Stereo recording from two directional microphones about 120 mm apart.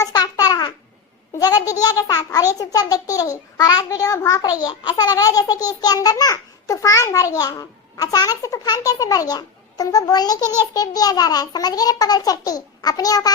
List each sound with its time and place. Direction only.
0.0 s babbling: 30° left (ahead or behind)
1.4 s a child's voice: 30° left (ahead or behind)